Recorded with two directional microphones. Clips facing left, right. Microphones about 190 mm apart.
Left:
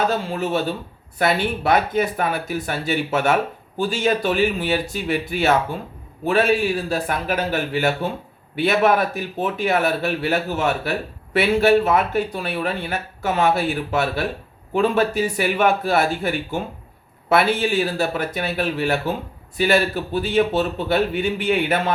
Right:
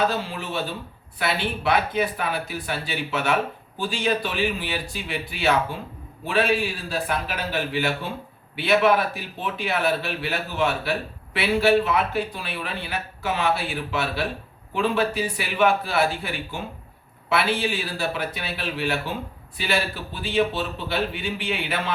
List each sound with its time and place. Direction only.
0.1 s speech: 45° left (ahead or behind)